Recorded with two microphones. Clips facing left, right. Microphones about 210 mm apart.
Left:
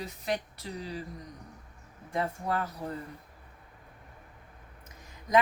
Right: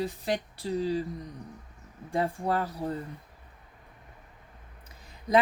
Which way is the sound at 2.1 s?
30° right (ahead or behind).